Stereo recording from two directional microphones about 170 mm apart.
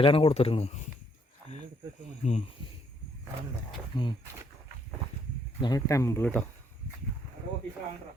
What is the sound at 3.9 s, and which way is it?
Speech, 25° left (ahead or behind).